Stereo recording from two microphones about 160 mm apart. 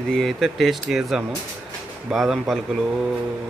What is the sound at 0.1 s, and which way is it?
Speech, centre (ahead or behind).